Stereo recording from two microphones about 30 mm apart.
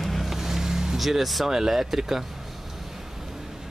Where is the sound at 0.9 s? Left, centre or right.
Centre.